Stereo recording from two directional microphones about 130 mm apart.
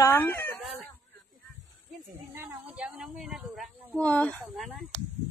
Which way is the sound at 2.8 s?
5° right (ahead or behind).